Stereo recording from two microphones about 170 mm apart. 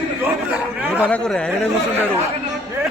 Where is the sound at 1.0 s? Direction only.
5° left (ahead or behind).